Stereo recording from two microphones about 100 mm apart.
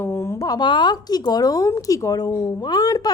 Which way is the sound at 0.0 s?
25° left (ahead or behind).